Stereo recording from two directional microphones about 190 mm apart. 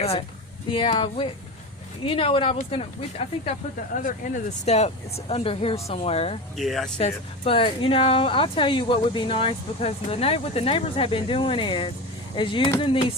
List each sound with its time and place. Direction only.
0.0 s speech: 30° left (ahead or behind)
4.0 s speech: 40° left (ahead or behind)
6.6 s speech: centre (ahead or behind)
7.0 s speech: 30° left (ahead or behind)